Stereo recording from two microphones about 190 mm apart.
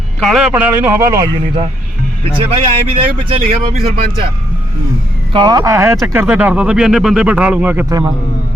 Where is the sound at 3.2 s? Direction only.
30° right (ahead or behind).